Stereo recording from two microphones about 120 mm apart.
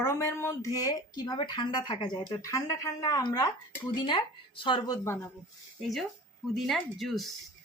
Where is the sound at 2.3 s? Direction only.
30° left (ahead or behind).